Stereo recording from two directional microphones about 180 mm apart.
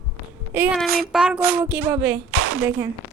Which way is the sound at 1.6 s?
10° right (ahead or behind).